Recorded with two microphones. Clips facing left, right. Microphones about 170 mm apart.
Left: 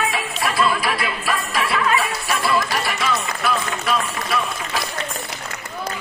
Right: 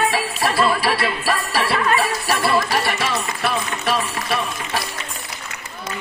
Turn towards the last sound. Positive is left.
turn(degrees=-30)  # may be behind; listen again after turning